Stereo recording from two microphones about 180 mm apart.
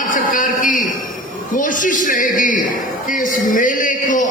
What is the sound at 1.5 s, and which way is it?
A man's voice, 45° left (ahead or behind).